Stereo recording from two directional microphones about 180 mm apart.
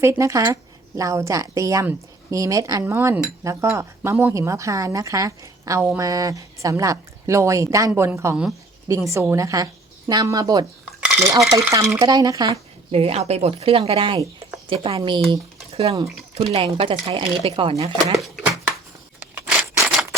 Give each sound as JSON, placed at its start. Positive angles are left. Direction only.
{"t": 0.0, "sound": "a woman's voice", "side_deg": -15}
{"t": 12.9, "sound": "speech", "side_deg": -35}
{"t": 19.3, "sound": "scissors", "side_deg": -15}